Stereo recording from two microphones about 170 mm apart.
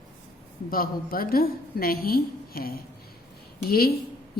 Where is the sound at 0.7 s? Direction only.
60° left (ahead or behind).